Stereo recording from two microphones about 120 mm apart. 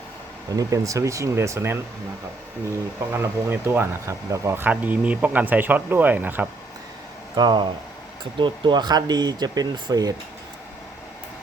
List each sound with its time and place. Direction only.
0.5 s speech: 30° right (ahead or behind)
3.1 s speech: 20° right (ahead or behind)
7.3 s speech: 40° right (ahead or behind)